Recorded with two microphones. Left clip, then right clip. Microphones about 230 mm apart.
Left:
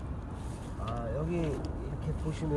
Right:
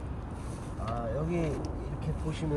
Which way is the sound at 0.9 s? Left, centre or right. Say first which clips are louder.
Right 2 dB; centre.